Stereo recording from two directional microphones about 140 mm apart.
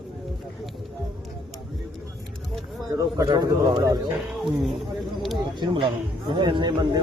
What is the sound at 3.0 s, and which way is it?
Speech, 25° right (ahead or behind).